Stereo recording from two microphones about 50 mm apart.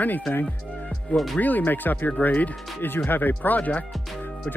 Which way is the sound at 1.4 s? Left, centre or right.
Left.